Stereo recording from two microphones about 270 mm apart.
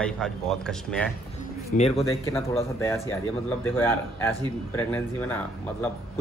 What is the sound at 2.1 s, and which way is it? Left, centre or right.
A man's voice, centre.